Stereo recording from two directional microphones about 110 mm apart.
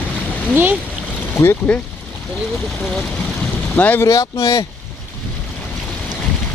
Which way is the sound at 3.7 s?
15° left (ahead or behind).